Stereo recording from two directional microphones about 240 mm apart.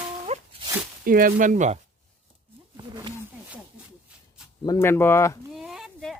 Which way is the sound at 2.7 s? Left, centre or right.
Centre.